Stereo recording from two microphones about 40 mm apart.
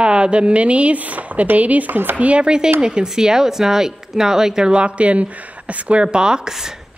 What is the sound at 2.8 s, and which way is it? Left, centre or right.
Speech, centre.